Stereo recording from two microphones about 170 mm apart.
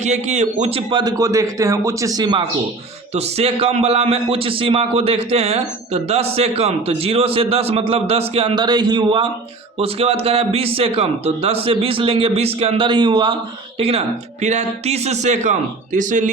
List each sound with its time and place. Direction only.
0.0 s a man's voice: 40° right (ahead or behind); by 2.4 s 25° right (ahead or behind)
3.2 s a man's voice: 35° right (ahead or behind)